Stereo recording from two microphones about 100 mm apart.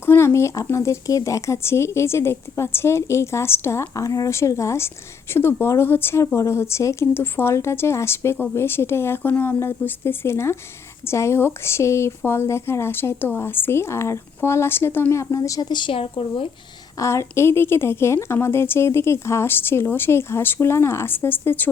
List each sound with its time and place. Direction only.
0.0 s speech: 25° left (ahead or behind)
15.7 s speech: 60° left (ahead or behind)
17.0 s speech: 30° left (ahead or behind)